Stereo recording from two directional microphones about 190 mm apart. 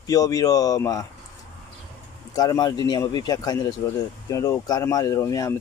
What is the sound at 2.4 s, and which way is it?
Speech, 20° left (ahead or behind).